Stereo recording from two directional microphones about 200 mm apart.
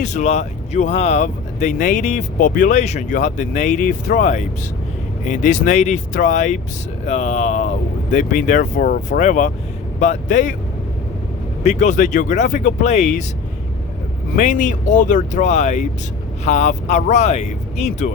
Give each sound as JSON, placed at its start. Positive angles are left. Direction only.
{"t": 0.0, "sound": "speech", "side_deg": 35}
{"t": 11.6, "sound": "speech", "side_deg": 35}
{"t": 14.3, "sound": "speech", "side_deg": 40}